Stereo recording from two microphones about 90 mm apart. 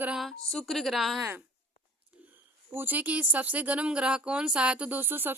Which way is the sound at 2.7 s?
20° right (ahead or behind).